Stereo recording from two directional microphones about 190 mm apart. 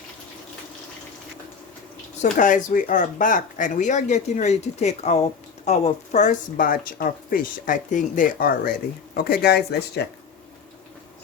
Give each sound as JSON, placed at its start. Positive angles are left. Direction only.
{"t": 2.2, "sound": "speech", "side_deg": 45}